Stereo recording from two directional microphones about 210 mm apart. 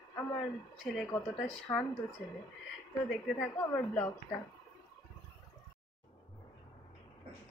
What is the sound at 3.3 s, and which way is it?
Speech, 10° left (ahead or behind).